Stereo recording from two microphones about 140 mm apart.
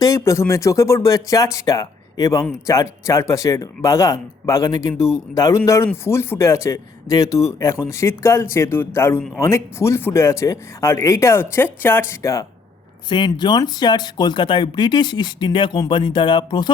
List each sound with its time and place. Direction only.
0.0 s speech: 20° left (ahead or behind)